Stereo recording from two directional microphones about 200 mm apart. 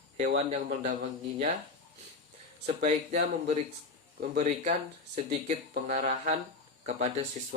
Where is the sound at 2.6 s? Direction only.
35° right (ahead or behind).